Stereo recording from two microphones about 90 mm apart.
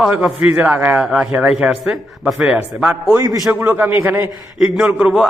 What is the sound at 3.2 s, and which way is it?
Speech, 40° right (ahead or behind).